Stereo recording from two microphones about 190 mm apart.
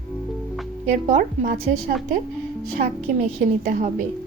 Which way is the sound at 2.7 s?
40° right (ahead or behind).